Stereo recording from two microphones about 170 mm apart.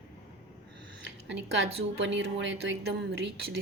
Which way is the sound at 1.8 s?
90° right.